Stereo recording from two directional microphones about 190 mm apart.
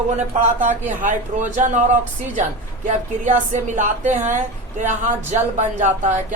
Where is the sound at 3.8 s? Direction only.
40° right (ahead or behind).